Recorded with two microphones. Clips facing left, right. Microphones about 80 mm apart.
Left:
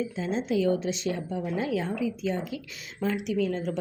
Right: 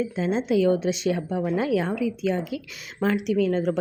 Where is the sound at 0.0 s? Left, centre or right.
Right.